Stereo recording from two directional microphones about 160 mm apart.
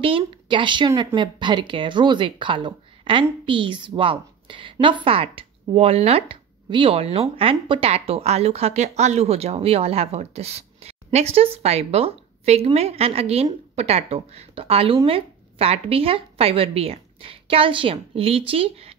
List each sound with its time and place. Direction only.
0.0 s speech: 35° right (ahead or behind)